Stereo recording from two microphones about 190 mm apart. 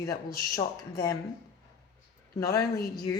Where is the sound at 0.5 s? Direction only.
20° left (ahead or behind).